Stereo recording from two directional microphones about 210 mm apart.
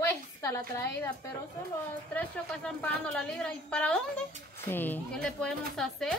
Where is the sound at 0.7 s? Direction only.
15° left (ahead or behind).